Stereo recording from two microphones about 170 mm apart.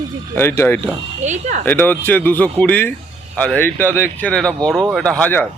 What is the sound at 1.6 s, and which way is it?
Speech, 10° left (ahead or behind).